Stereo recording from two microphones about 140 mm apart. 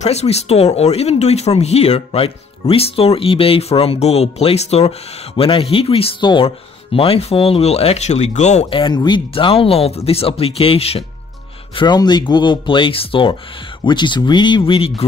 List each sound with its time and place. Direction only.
0.0 s speech: 50° left (ahead or behind)
8.6 s speech: 35° left (ahead or behind)
11.7 s speech: 30° left (ahead or behind)